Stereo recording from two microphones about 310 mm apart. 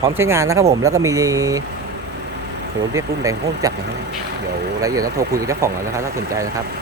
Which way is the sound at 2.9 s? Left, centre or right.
Centre.